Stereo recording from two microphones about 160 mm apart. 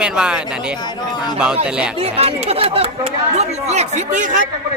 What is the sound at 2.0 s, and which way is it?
Speech, 40° right (ahead or behind).